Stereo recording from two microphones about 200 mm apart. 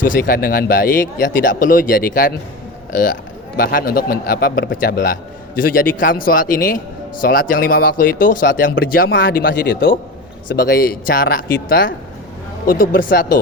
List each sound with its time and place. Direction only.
0.0 s a man's voice: 45° left (ahead or behind)
3.6 s a man's voice: 45° left (ahead or behind)
10.5 s a man's voice: 50° left (ahead or behind)